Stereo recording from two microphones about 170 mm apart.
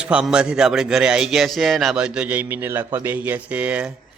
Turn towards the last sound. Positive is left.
turn(degrees=-5)  # may be behind; listen again after turning